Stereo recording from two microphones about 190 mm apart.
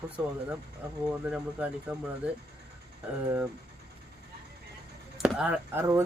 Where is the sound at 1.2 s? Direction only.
5° right (ahead or behind).